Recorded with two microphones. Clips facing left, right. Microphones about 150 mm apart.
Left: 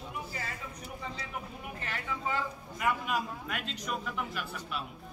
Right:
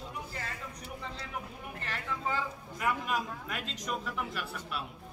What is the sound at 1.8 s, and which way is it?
A man's voice, centre (ahead or behind).